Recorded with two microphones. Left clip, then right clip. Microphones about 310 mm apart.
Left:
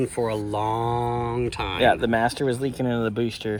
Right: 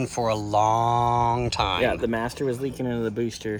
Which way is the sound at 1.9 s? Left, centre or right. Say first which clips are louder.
Left 6 dB; centre.